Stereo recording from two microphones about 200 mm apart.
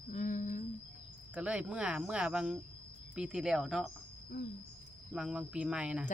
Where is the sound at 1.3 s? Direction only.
5° right (ahead or behind).